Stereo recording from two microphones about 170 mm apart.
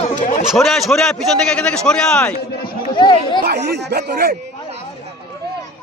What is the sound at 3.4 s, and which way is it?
Speech, 75° right (ahead or behind).